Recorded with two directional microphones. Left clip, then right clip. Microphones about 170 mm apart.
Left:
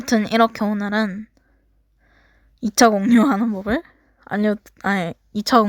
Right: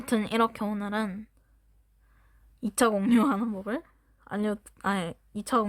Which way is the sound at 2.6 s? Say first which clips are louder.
Left 10 dB; 30° left (ahead or behind).